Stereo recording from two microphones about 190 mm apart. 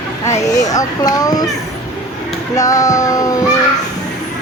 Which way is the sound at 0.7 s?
20° left (ahead or behind).